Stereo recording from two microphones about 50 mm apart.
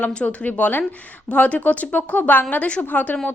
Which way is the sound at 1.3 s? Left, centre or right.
Left.